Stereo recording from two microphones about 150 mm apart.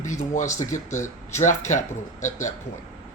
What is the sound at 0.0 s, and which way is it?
Speech, 55° left (ahead or behind).